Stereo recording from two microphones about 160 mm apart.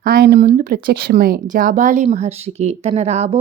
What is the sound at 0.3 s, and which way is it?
A woman's voice, 55° right (ahead or behind).